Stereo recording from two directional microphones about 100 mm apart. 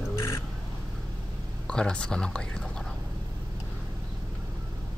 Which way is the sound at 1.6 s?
10° left (ahead or behind).